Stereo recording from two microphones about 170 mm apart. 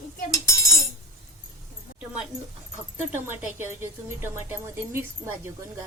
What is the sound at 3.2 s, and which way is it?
A woman's voice, 10° right (ahead or behind).